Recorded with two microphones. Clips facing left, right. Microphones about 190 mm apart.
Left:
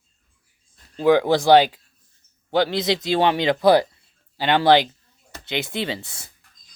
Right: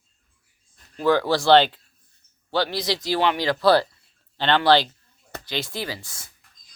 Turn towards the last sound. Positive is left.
turn(degrees=65)  # may be behind; listen again after turning